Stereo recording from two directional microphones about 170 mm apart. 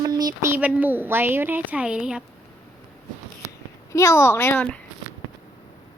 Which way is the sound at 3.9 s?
15° left (ahead or behind).